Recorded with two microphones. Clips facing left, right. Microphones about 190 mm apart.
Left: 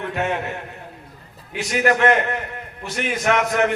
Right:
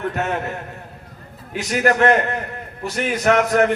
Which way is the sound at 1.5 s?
40° right (ahead or behind).